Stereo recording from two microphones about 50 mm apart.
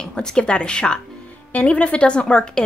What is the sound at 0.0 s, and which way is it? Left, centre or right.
A woman's voice, centre.